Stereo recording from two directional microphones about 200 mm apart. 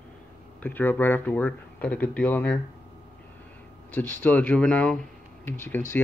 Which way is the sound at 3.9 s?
10° left (ahead or behind).